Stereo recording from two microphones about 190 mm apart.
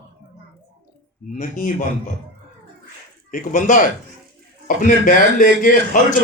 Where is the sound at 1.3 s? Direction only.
45° left (ahead or behind).